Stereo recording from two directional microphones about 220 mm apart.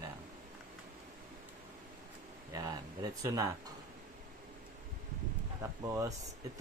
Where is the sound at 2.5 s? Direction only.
15° right (ahead or behind).